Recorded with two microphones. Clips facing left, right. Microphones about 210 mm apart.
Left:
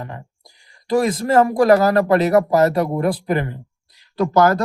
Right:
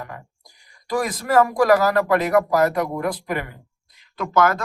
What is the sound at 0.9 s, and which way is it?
Speech, 25° left (ahead or behind).